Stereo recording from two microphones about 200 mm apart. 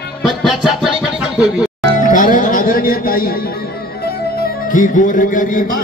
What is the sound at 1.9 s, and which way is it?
Music, 40° left (ahead or behind).